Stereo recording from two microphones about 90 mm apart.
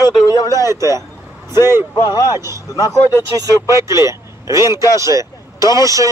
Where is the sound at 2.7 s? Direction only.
40° left (ahead or behind).